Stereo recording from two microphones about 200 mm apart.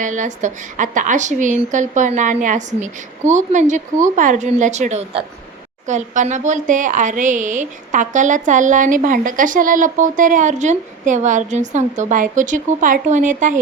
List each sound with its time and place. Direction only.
0.0 s a woman's voice: 40° right (ahead or behind)